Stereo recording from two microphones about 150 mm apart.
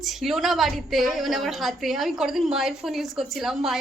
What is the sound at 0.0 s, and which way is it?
A woman's voice, centre (ahead or behind).